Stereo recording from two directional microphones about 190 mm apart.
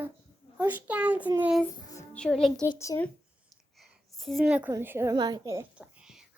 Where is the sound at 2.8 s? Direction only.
15° left (ahead or behind).